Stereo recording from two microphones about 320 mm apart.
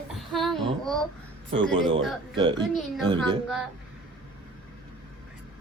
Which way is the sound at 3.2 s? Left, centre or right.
Centre.